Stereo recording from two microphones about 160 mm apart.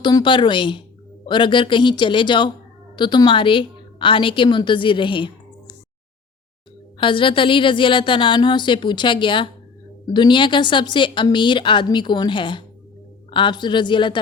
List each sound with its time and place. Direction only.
0.0 s a woman's voice: 30° left (ahead or behind)
7.0 s a woman's voice: 30° left (ahead or behind)